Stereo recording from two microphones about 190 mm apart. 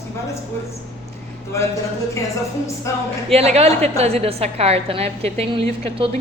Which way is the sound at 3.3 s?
35° right (ahead or behind).